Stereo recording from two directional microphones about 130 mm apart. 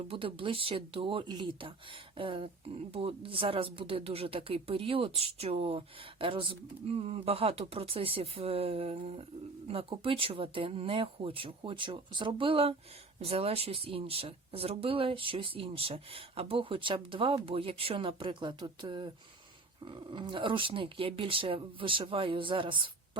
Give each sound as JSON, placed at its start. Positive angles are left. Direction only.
{"t": 0.1, "sound": "speech", "side_deg": -45}